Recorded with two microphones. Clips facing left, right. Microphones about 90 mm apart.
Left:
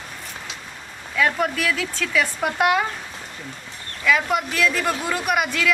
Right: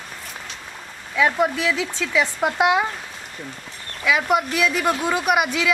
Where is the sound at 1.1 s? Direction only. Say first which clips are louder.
Right 2 dB; 15° right (ahead or behind).